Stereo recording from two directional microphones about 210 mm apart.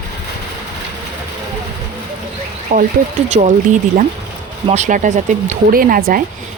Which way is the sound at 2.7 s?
35° right (ahead or behind).